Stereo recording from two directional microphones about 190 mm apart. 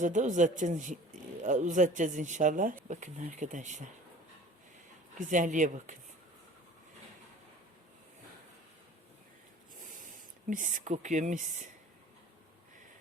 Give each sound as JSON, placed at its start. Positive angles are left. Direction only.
{"t": 0.0, "sound": "speech", "side_deg": -40}
{"t": 5.1, "sound": "speech", "side_deg": -40}
{"t": 10.5, "sound": "speech", "side_deg": -45}